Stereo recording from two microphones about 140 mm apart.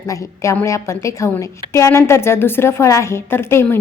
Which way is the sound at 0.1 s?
20° left (ahead or behind).